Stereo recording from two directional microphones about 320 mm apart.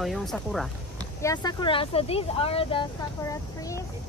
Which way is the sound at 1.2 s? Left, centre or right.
Centre.